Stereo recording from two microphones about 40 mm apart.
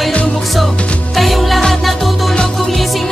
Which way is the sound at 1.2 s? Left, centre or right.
Centre.